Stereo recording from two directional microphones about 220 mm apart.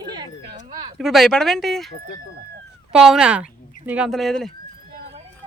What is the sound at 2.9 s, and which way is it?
Speech, centre (ahead or behind).